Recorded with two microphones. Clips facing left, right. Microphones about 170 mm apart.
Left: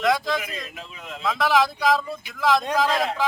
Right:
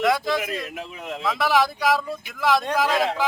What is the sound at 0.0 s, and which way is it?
Speech, 5° right (ahead or behind).